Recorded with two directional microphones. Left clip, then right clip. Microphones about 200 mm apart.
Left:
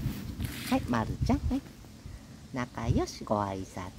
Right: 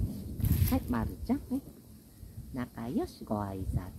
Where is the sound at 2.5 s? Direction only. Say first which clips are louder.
Left 3 dB; 30° left (ahead or behind).